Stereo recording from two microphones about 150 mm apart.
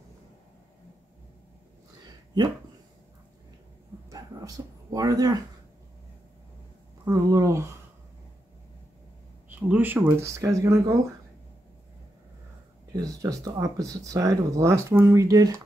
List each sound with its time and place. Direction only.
4.1 s a sound: 25° right (ahead or behind)
7.1 s speech: 25° right (ahead or behind)
9.5 s speech: 10° right (ahead or behind)
12.9 s speech: 25° right (ahead or behind)